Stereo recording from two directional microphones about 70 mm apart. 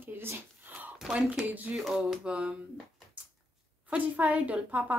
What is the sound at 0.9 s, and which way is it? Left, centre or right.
Speech, centre.